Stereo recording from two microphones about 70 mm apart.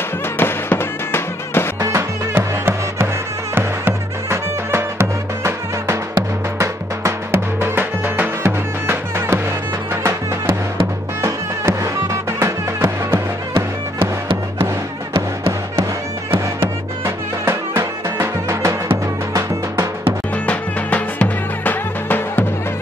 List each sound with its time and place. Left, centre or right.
0.4 s music: left
1.8 s music: right
11.1 s music: right
17.5 s music: right
20.4 s music: left